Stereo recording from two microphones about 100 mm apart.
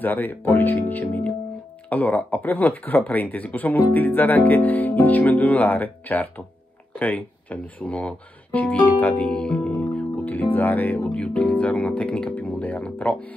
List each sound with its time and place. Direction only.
0.0 s speech: 20° left (ahead or behind)